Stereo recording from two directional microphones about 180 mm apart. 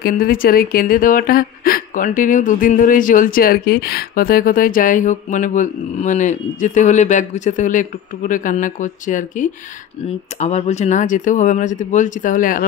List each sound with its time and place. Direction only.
0.0 s a woman's voice: 55° left (ahead or behind)